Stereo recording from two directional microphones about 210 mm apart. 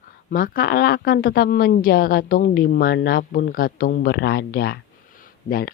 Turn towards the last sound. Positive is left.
turn(degrees=45)  # may be behind; listen again after turning